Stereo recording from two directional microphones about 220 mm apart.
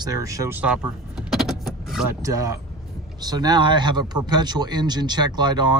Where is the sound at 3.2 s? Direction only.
20° right (ahead or behind).